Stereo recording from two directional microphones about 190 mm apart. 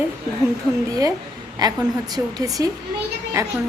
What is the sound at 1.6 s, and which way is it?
A woman's voice, 20° right (ahead or behind).